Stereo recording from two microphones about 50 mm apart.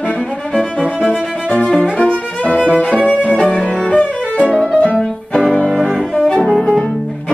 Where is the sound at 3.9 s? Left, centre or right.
Centre.